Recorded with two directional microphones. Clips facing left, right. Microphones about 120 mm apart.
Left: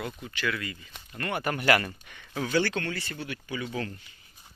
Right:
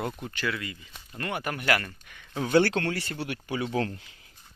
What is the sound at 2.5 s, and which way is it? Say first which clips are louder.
Speech: right 5 dB; 70° right (ahead or behind).